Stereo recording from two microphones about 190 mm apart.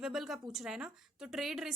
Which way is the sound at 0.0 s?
Centre (ahead or behind).